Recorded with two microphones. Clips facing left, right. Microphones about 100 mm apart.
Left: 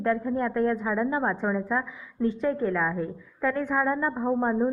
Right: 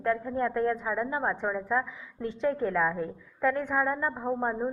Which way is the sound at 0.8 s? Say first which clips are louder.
Left 4 dB; 10° right (ahead or behind).